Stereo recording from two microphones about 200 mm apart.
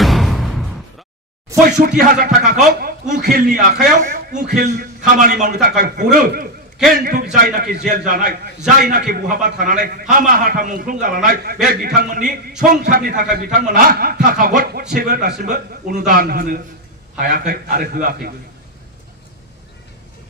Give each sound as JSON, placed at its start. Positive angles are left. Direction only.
{"t": 0.0, "sound": "music", "side_deg": 0}
{"t": 1.7, "sound": "a man's voice", "side_deg": -45}